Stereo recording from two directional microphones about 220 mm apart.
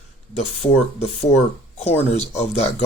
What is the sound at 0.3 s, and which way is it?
Speech, 30° left (ahead or behind).